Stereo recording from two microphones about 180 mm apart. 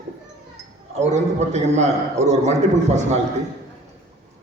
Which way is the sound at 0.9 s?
40° right (ahead or behind).